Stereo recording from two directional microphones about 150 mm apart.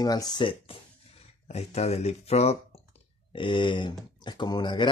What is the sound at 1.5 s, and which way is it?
Speech, 45° left (ahead or behind).